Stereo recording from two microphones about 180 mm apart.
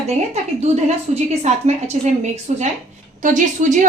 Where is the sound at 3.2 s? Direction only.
45° right (ahead or behind).